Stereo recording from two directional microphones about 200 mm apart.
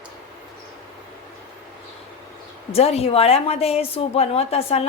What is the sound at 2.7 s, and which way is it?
A woman's voice, 30° left (ahead or behind).